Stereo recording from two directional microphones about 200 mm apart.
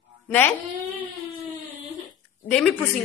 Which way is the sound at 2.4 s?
5° left (ahead or behind).